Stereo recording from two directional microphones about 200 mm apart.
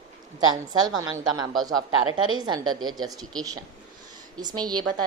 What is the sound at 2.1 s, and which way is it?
Speech, 90° right.